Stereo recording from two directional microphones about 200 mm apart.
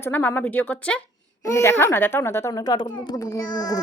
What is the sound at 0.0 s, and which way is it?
A woman's voice, 10° left (ahead or behind).